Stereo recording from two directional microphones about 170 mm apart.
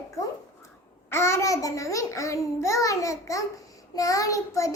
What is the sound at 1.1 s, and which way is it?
Child singing, 15° left (ahead or behind).